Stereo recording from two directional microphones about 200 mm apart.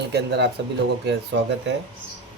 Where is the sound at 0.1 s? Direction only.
55° right (ahead or behind).